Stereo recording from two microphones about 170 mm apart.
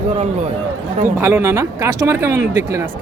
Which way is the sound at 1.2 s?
15° right (ahead or behind).